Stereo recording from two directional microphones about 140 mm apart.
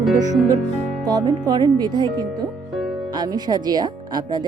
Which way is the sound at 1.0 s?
30° right (ahead or behind).